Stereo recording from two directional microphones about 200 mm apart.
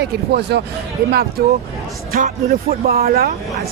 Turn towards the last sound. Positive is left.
turn(degrees=-50)  # may be behind; listen again after turning